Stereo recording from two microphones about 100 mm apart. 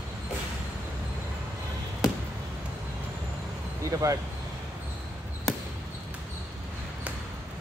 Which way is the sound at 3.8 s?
35° right (ahead or behind).